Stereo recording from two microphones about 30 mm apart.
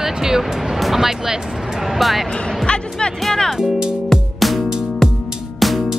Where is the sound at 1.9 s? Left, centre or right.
Centre.